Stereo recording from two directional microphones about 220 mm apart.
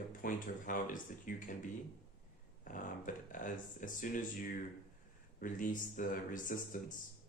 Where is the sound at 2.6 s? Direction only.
35° left (ahead or behind).